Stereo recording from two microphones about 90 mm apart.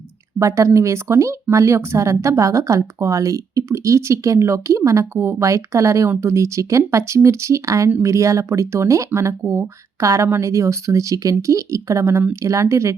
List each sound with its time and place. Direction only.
0.3 s a woman's voice: 35° right (ahead or behind)